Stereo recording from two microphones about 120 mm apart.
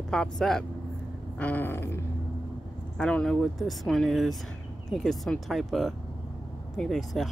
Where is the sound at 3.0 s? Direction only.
5° left (ahead or behind).